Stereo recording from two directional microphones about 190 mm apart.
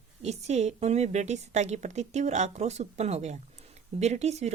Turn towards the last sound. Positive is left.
turn(degrees=-35)  # may be behind; listen again after turning